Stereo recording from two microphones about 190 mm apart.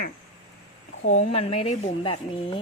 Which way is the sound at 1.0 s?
40° left (ahead or behind).